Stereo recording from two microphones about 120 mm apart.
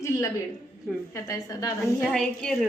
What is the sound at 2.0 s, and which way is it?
Speech, 5° left (ahead or behind).